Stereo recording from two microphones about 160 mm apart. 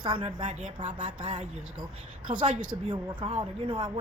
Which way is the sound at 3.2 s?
35° right (ahead or behind).